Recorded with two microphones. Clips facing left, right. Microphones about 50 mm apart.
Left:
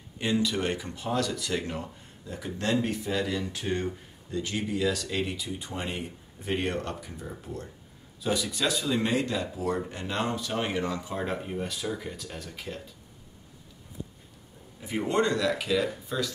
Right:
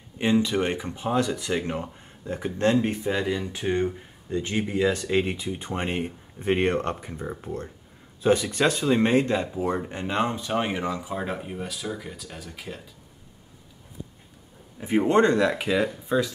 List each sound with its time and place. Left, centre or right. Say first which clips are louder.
0.2 s speech: right 5 dB; right
9.5 s speech: right 3 dB; right; by 12.8 s centre
14.8 s speech: right 7 dB; right